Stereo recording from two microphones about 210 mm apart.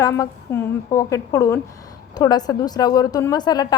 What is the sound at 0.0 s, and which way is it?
A woman's voice, 15° left (ahead or behind).